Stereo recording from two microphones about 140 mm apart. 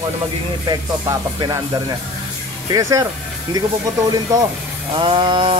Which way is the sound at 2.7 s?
25° right (ahead or behind).